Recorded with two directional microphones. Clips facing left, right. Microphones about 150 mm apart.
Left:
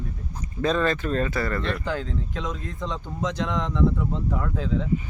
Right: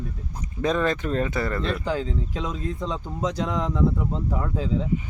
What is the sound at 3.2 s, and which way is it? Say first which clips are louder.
Speech: right 1 dB; 35° right (ahead or behind).